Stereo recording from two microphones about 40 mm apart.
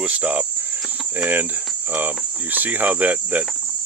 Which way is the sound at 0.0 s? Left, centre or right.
Right.